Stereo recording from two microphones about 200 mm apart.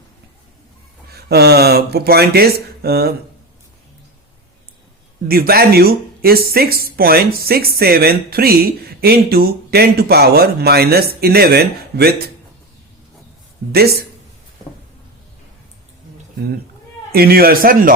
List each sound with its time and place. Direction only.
1.1 s speech: 55° right (ahead or behind)
5.3 s speech: 50° right (ahead or behind)
17.1 s speech: 50° right (ahead or behind)